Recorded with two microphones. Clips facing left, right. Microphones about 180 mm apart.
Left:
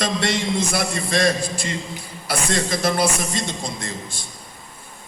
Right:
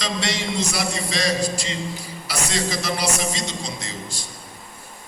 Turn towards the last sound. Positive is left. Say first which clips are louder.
# left 2 dB
turn(degrees=55)  # may be behind; listen again after turning